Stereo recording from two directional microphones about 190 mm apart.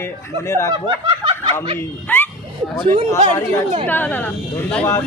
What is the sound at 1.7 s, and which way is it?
Speech, 10° left (ahead or behind).